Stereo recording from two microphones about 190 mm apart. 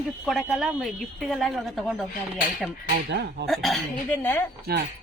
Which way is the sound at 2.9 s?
60° right (ahead or behind).